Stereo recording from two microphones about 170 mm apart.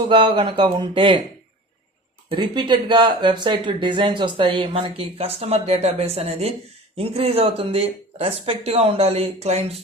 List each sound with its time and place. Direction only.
0.1 s speech: 25° right (ahead or behind)
2.3 s speech: 25° right (ahead or behind)